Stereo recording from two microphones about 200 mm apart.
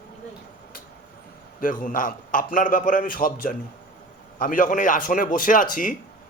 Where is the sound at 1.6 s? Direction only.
40° left (ahead or behind).